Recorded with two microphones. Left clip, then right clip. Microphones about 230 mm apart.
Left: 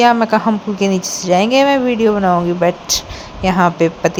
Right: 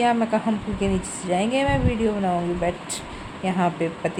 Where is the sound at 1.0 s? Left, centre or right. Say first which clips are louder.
Left 11 dB; centre.